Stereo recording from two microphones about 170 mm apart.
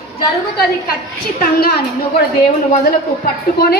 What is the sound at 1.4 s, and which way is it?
Speech, 65° left (ahead or behind).